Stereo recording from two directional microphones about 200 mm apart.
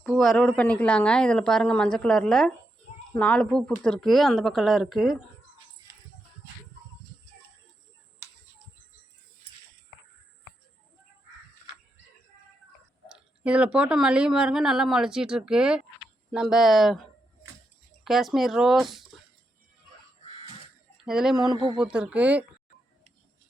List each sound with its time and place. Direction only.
0.1 s speech: centre (ahead or behind)
13.1 s speech: 5° right (ahead or behind)
21.0 s speech: 5° right (ahead or behind)
21.5 s speech: 25° right (ahead or behind)
21.8 s speech: 5° right (ahead or behind)